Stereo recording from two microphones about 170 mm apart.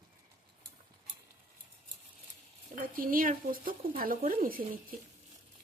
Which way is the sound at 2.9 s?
55° right (ahead or behind).